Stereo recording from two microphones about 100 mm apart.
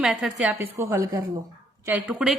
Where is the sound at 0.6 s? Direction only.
25° right (ahead or behind).